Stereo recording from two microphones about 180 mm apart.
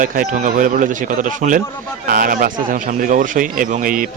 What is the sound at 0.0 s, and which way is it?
A man's voice, 45° right (ahead or behind).